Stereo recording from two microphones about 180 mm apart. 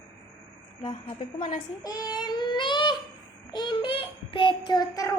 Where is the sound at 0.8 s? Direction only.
25° left (ahead or behind).